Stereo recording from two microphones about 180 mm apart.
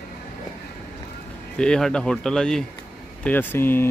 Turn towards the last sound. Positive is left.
turn(degrees=10)  # may be behind; listen again after turning